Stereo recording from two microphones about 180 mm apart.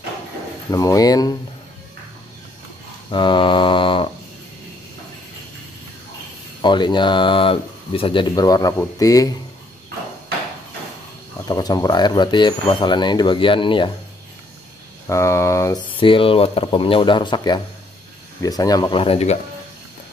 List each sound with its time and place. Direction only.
0.7 s speech: 20° left (ahead or behind)
3.1 s a sound: 25° left (ahead or behind)
6.6 s speech: 25° left (ahead or behind)
11.4 s speech: 20° left (ahead or behind)
15.0 s speech: 15° left (ahead or behind)
16.0 s speech: 30° left (ahead or behind)